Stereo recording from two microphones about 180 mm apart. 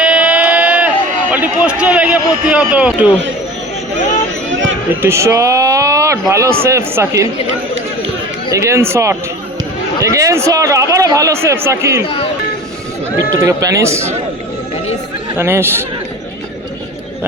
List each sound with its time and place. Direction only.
0.0 s a sound: 5° right (ahead or behind)
1.3 s a man's voice: 10° right (ahead or behind)
5.0 s a man's voice: 15° right (ahead or behind)
8.4 s a man's voice: 15° right (ahead or behind)
12.0 s speech: 35° left (ahead or behind)
13.4 s a man's voice: 15° right (ahead or behind)
15.4 s a man's voice: 15° right (ahead or behind)